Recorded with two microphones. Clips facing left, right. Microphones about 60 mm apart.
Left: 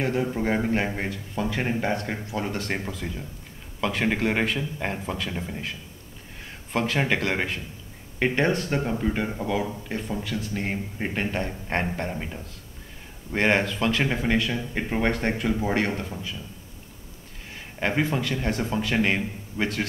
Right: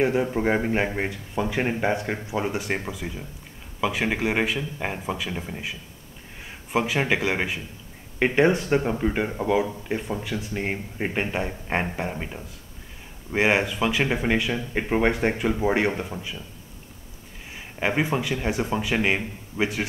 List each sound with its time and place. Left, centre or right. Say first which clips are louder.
0.0 s speech: right 3 dB; centre
17.6 s speech: right 1 dB; centre